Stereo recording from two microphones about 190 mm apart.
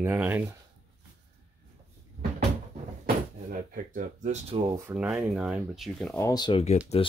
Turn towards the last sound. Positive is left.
turn(degrees=30)  # may be behind; listen again after turning